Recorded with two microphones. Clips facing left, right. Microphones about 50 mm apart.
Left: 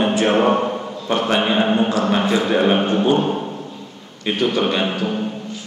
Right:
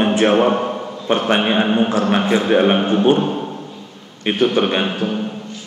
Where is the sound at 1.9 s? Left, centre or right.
Right.